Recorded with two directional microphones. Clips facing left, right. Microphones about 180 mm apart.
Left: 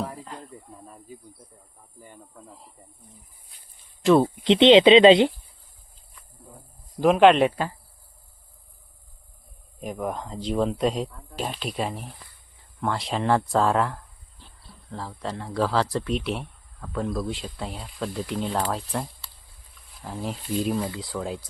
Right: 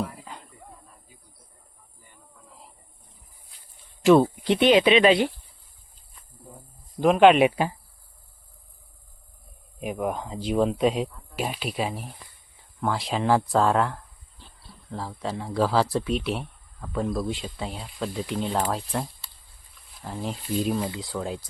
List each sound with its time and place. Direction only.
4.0 s speech: centre (ahead or behind)
4.4 s speech: 20° left (ahead or behind)
7.0 s speech: centre (ahead or behind)
7.4 s speech: 15° right (ahead or behind)
9.8 s speech: 5° right (ahead or behind)